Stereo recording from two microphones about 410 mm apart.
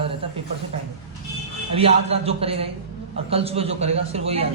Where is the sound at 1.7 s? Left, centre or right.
Centre.